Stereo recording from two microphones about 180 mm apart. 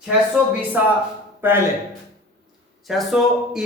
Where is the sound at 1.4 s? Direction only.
10° right (ahead or behind).